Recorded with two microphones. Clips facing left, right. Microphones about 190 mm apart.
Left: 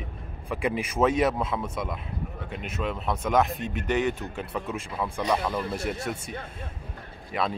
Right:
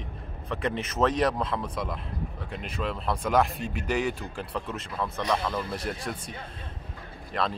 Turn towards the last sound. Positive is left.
turn(degrees=5)  # may be behind; listen again after turning